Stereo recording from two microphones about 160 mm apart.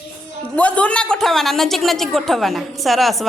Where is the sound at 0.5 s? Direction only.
10° left (ahead or behind).